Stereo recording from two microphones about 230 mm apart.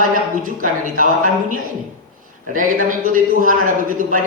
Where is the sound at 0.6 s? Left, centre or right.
Right.